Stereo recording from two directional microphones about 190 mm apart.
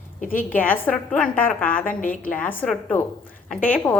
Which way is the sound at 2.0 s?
45° left (ahead or behind).